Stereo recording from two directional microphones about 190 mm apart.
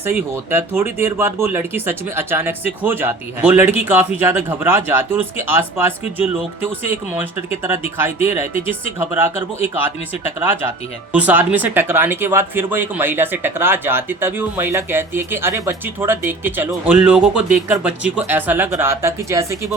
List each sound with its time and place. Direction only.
0.5 s speech: 10° right (ahead or behind)
8.5 s speech: 30° left (ahead or behind)
9.0 s speech: 10° right (ahead or behind)